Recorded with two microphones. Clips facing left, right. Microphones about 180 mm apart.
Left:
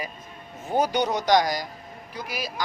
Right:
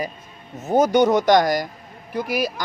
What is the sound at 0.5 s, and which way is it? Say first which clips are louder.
Speech: right 7 dB; 45° right (ahead or behind).